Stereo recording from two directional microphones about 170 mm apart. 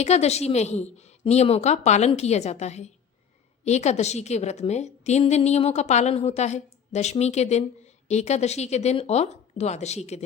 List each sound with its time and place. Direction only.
0.0 s a woman's voice: 40° left (ahead or behind)